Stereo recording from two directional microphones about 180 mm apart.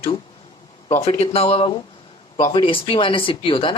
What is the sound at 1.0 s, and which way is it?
Speech, 35° left (ahead or behind).